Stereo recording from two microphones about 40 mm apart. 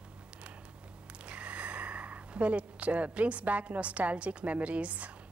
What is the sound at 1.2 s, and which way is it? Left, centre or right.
A woman's voice, right.